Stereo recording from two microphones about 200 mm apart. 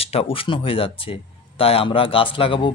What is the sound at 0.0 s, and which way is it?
Speech, 30° left (ahead or behind).